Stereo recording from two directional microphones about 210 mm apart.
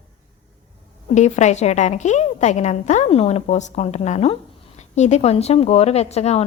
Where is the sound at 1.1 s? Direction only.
35° left (ahead or behind).